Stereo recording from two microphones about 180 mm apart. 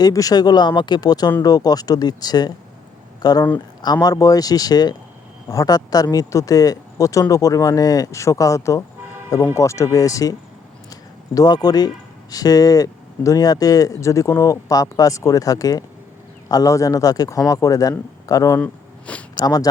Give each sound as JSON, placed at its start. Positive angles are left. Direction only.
{"t": 0.0, "sound": "speech", "side_deg": 20}
{"t": 11.3, "sound": "speech", "side_deg": 20}
{"t": 18.6, "sound": "a sound", "side_deg": 5}
{"t": 19.4, "sound": "speech", "side_deg": 20}